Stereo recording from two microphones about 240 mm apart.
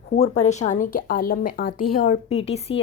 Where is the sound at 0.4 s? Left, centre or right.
Left.